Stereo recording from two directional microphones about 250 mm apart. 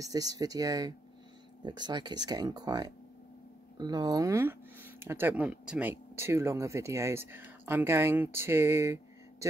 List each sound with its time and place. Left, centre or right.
0.0 s speech: centre